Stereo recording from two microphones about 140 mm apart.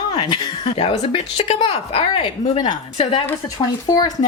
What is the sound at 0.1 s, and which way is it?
Speech, 30° left (ahead or behind).